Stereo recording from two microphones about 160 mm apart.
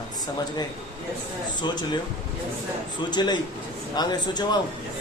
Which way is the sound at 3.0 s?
25° left (ahead or behind).